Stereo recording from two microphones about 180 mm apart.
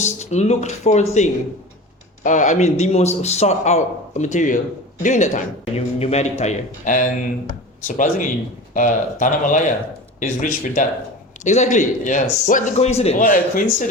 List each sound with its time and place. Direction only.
0.0 s speech: 40° left (ahead or behind)
2.2 s speech: 45° left (ahead or behind)
13.2 s speech: 50° left (ahead or behind)